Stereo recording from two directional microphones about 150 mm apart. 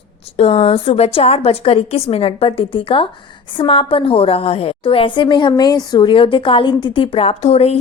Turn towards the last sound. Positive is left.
turn(degrees=45)  # may be behind; listen again after turning